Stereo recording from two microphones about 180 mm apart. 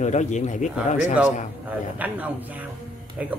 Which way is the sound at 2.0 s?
10° right (ahead or behind).